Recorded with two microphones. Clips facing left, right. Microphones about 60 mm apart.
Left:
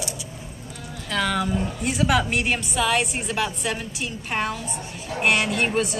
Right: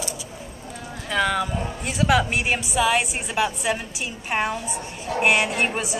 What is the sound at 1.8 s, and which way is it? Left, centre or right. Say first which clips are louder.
A woman's voice: right 2 dB; centre.